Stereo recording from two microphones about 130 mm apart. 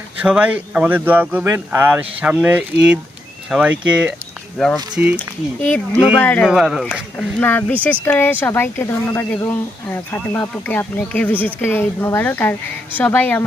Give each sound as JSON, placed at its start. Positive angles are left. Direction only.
{"t": 0.2, "sound": "speech", "side_deg": -10}
{"t": 4.5, "sound": "speech", "side_deg": 5}
{"t": 4.9, "sound": "speech", "side_deg": -10}
{"t": 6.1, "sound": "speech", "side_deg": 10}
{"t": 6.5, "sound": "speech", "side_deg": -5}
{"t": 7.3, "sound": "speech", "side_deg": 15}